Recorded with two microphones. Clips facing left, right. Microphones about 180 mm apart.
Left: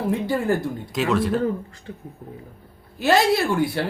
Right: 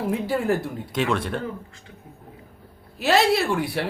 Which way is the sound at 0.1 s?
Centre (ahead or behind).